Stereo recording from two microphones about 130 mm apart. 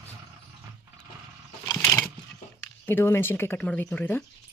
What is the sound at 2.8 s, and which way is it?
Speech, 20° left (ahead or behind).